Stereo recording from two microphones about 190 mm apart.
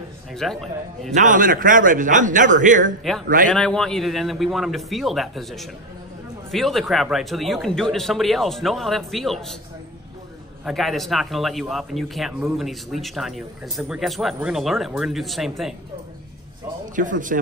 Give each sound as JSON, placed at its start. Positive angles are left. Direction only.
{"t": 0.3, "sound": "speech", "side_deg": 0}
{"t": 1.1, "sound": "a man's voice", "side_deg": -40}
{"t": 3.0, "sound": "speech", "side_deg": 0}
{"t": 10.6, "sound": "speech", "side_deg": 0}
{"t": 16.9, "sound": "a man's voice", "side_deg": -45}